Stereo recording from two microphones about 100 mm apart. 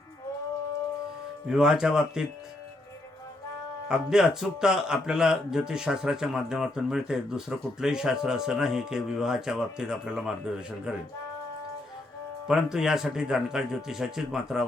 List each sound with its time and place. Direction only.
1.5 s speech: 5° right (ahead or behind)
3.8 s speech: 5° right (ahead or behind)
12.5 s a man's voice: 5° right (ahead or behind)